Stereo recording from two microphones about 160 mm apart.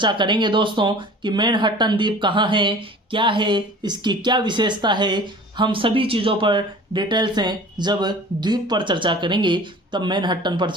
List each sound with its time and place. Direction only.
0.0 s speech: 30° right (ahead or behind)